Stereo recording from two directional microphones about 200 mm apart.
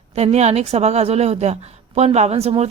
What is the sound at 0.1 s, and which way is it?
Speech, 35° right (ahead or behind).